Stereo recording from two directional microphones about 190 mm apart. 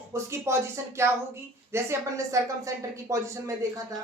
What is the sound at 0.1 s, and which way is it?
A woman's voice, 15° right (ahead or behind).